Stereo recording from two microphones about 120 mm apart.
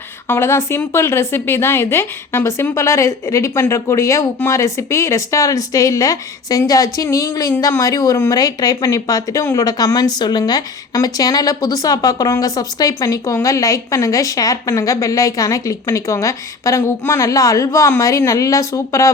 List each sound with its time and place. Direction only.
0.3 s speech: 20° left (ahead or behind)